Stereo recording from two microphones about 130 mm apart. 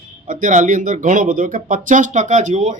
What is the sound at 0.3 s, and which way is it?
Speech, 90° right.